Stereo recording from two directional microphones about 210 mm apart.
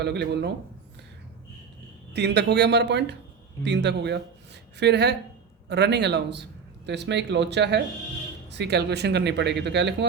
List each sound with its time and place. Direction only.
0.0 s speech: 55° right (ahead or behind)
2.1 s a man's voice: 55° right (ahead or behind)